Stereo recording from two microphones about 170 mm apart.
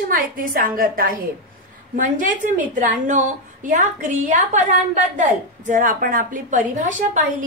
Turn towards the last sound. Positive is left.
turn(degrees=-50)  # may be behind; listen again after turning